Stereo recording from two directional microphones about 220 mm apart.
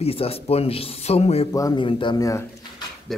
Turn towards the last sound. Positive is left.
turn(degrees=0)  # may be behind; listen again after turning